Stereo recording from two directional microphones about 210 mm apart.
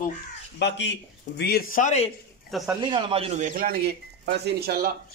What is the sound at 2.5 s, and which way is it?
Speech, centre (ahead or behind).